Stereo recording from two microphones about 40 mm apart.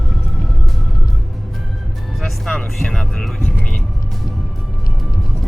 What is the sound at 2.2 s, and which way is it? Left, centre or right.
Music, centre.